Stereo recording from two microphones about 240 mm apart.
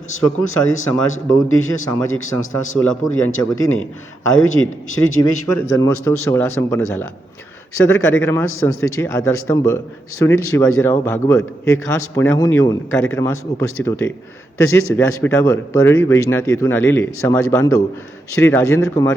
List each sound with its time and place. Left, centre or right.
0.1 s a man's voice: left
2.7 s a man's voice: centre
3.1 s a man's voice: left
5.7 s a man's voice: centre
8.2 s a man's voice: centre